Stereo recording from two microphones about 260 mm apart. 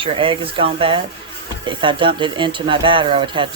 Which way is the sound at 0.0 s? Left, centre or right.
Centre.